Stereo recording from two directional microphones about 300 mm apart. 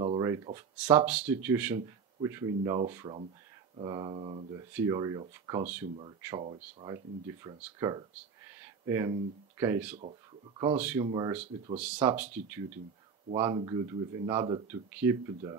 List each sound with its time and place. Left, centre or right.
0.0 s a sound: centre
0.6 s speech: centre
10.6 s speech: centre